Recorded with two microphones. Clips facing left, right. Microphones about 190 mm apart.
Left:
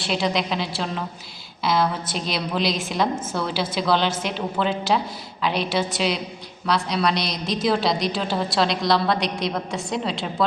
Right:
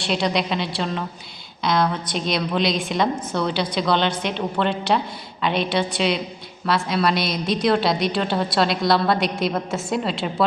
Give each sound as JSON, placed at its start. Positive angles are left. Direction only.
{"t": 0.0, "sound": "a woman's voice", "side_deg": 0}